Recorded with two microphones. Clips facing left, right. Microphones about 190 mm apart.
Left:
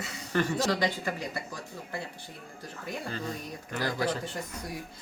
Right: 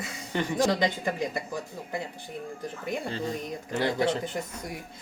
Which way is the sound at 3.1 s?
30° right (ahead or behind).